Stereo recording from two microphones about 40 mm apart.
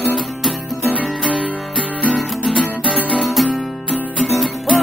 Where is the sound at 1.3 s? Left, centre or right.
Left.